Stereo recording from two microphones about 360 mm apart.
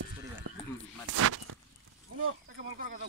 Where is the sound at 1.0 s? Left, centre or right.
Right.